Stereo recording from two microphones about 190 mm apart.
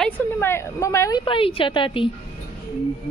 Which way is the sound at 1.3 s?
30° left (ahead or behind).